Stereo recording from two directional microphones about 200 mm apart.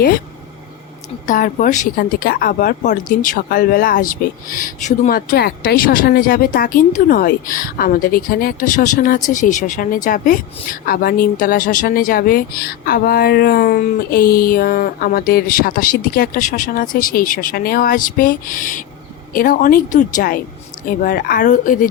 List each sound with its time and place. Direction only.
1.3 s speech: 40° left (ahead or behind)